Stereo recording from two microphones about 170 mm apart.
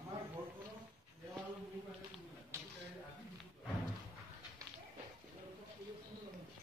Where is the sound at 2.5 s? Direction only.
15° right (ahead or behind).